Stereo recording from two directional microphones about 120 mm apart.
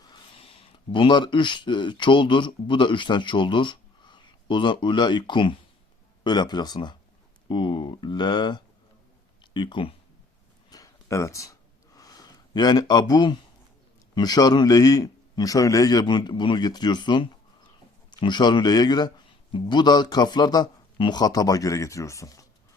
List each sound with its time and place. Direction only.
0.0 s speech: 45° left (ahead or behind)
10.7 s a sound: 30° left (ahead or behind)
14.2 s speech: 35° left (ahead or behind)